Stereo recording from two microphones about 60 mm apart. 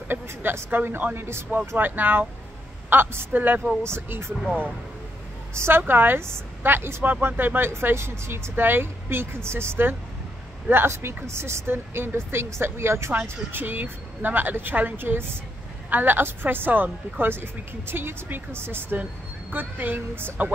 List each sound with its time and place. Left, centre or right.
0.1 s a woman's voice: right
3.8 s speech: right
5.6 s a woman's voice: right
13.5 s a woman's voice: right